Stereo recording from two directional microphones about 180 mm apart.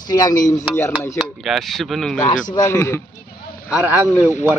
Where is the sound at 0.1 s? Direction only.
20° left (ahead or behind).